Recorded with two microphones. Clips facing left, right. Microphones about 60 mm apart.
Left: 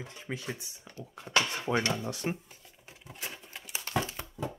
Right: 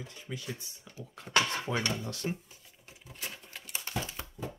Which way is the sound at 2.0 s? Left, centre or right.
Centre.